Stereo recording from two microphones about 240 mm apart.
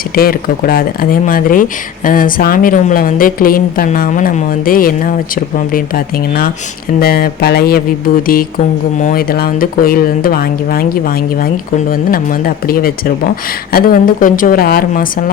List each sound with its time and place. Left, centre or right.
0.2 s speech: left
7.0 s speech: left
9.0 s speech: left
12.6 s speech: left